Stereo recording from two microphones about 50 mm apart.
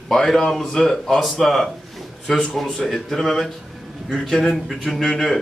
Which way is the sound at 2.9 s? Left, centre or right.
Centre.